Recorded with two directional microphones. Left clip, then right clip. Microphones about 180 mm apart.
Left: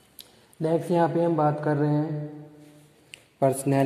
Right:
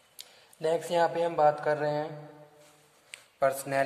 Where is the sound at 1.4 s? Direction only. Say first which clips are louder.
Even; 10° right (ahead or behind).